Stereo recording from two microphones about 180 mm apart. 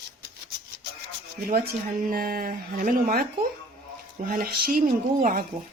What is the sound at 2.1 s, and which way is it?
Speech, 55° right (ahead or behind).